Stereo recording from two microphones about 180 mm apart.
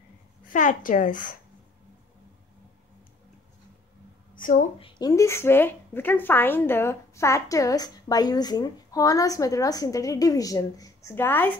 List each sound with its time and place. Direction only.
0.5 s a woman's voice: 45° left (ahead or behind)
4.4 s a woman's voice: 50° left (ahead or behind)
4.7 s a woman's voice: 25° left (ahead or behind); by 11.5 s 10° left (ahead or behind)